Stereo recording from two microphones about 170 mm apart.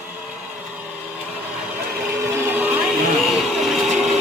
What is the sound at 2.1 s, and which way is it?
Vehicle, 15° right (ahead or behind).